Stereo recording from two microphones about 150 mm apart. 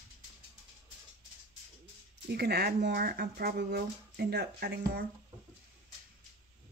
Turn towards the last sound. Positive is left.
turn(degrees=-90)